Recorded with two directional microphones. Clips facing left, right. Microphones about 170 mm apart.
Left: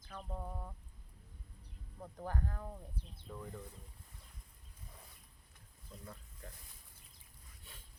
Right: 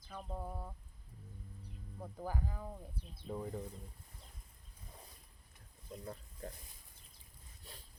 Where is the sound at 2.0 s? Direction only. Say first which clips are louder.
Even; 5° right (ahead or behind).